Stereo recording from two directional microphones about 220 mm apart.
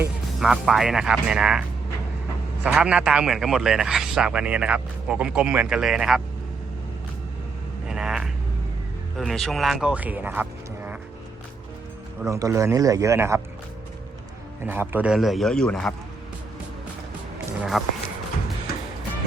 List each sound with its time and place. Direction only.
0.3 s a man's voice: centre (ahead or behind)
2.7 s a man's voice: 5° right (ahead or behind)
7.9 s vehicle: 5° right (ahead or behind)
9.1 s speech: centre (ahead or behind)
12.2 s a man's voice: 15° right (ahead or behind)
14.7 s a man's voice: 10° right (ahead or behind)
17.6 s a man's voice: centre (ahead or behind)